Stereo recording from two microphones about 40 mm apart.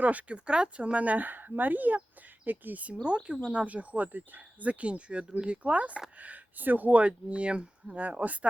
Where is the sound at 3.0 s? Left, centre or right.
Right.